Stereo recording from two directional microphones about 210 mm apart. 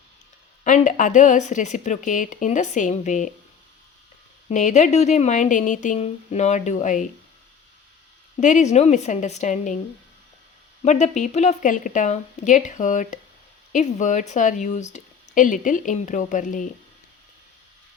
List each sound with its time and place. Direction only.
0.6 s speech: 35° left (ahead or behind)
4.4 s speech: 35° left (ahead or behind)
8.4 s speech: 35° left (ahead or behind)
10.8 s speech: 35° left (ahead or behind)